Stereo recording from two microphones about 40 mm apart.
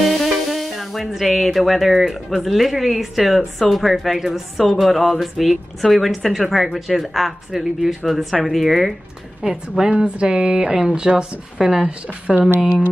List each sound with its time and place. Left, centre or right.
0.2 s music: centre
2.2 s speech: centre
9.4 s a woman's voice: centre
12.3 s a woman's voice: centre